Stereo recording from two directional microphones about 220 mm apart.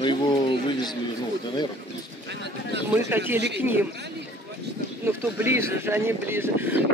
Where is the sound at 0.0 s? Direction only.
20° left (ahead or behind).